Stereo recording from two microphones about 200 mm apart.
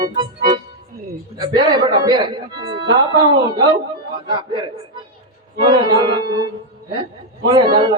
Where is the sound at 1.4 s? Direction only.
20° right (ahead or behind).